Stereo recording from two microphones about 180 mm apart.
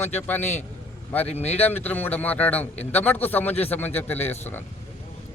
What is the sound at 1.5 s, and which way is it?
A man's voice, 10° left (ahead or behind).